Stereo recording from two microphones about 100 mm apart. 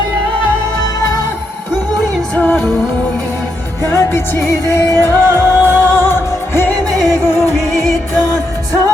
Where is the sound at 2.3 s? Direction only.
15° left (ahead or behind).